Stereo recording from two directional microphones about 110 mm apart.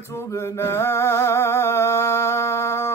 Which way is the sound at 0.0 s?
25° left (ahead or behind).